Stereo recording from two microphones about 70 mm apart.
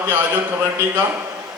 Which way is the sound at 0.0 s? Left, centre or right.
Right.